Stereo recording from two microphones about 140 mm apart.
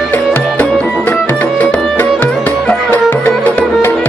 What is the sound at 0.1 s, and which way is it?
Music, 15° left (ahead or behind).